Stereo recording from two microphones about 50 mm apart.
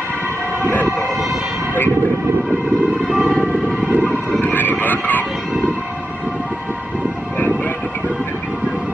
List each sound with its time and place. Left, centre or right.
3.8 s siren: right
4.4 s vehicle: left